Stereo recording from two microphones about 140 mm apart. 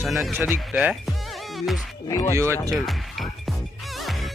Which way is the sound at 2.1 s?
25° left (ahead or behind).